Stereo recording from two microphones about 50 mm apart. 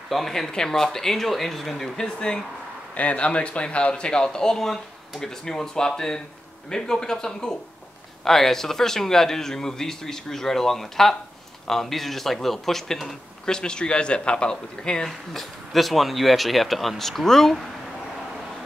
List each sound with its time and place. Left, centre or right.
0.1 s speech: centre
15.0 s speech: centre